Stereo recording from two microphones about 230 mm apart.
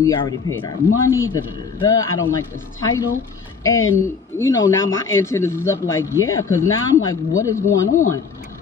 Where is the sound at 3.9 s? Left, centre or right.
Centre.